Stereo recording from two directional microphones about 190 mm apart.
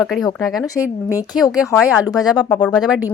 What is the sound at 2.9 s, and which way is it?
Speech, 5° right (ahead or behind).